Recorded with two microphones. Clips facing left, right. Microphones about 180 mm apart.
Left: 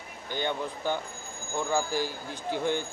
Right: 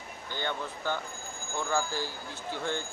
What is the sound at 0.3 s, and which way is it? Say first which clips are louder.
Speech: left 4 dB; 15° left (ahead or behind).